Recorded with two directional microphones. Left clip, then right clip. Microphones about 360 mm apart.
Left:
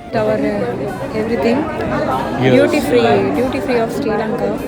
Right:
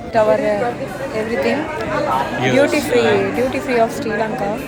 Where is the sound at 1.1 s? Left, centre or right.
Centre.